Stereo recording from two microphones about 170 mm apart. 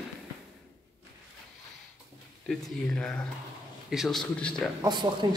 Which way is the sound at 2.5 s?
5° left (ahead or behind).